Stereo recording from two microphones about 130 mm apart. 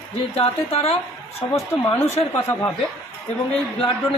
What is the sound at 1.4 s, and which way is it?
Speech, 40° left (ahead or behind).